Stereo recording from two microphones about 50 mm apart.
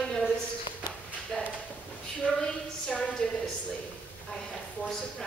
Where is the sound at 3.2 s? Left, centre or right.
Centre.